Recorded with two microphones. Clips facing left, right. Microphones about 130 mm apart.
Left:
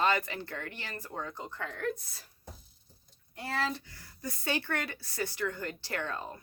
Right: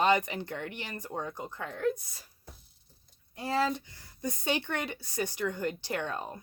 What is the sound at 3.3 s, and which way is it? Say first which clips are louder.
Speech: right 5 dB; 15° right (ahead or behind).